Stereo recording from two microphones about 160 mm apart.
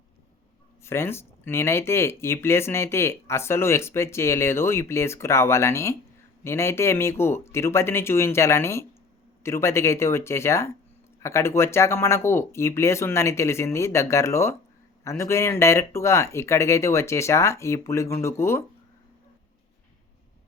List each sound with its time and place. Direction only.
0.8 s speech: 15° left (ahead or behind)